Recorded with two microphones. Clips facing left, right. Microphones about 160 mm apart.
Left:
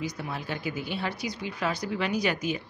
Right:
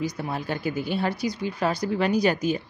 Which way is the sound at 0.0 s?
45° right (ahead or behind).